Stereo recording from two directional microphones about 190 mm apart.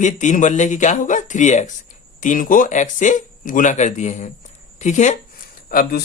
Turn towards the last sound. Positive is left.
turn(degrees=50)  # may be behind; listen again after turning